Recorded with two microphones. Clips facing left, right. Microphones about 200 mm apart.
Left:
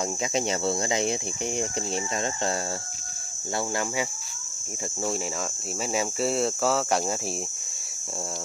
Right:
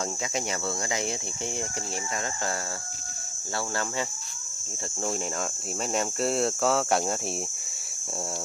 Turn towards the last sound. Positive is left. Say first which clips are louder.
# even
turn(degrees=0)  # may be behind; listen again after turning